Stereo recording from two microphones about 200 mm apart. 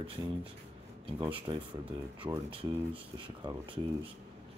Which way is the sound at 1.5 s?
20° right (ahead or behind).